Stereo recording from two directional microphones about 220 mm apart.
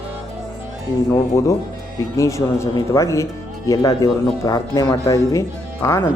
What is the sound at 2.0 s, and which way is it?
Speech, 15° left (ahead or behind).